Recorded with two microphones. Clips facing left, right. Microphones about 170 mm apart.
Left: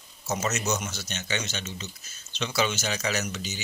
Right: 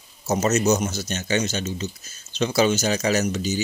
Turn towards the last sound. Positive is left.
turn(degrees=-40)  # may be behind; listen again after turning